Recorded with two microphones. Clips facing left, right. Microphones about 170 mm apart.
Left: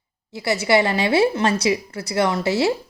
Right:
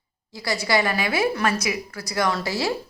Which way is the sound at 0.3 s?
25° left (ahead or behind).